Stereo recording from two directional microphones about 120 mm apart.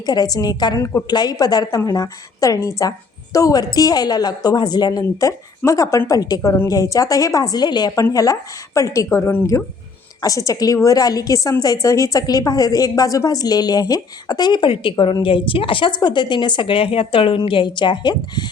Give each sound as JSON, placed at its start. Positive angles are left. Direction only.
{"t": 0.0, "sound": "a woman's voice", "side_deg": 35}